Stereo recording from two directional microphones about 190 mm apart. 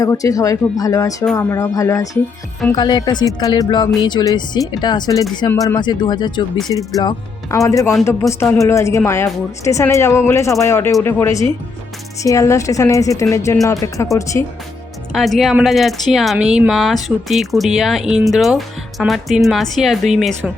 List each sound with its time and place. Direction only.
0.0 s a woman's voice: 15° left (ahead or behind)
15.1 s speech: centre (ahead or behind)